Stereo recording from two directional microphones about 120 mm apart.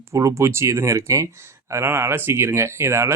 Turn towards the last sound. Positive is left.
turn(degrees=-20)  # may be behind; listen again after turning